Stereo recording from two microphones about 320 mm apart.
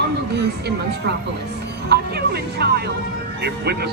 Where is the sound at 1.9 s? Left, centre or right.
Right.